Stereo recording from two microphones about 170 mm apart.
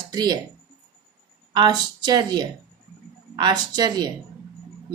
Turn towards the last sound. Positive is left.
turn(degrees=-25)  # may be behind; listen again after turning